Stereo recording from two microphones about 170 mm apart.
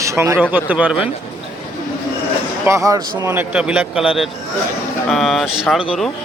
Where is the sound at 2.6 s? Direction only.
20° right (ahead or behind).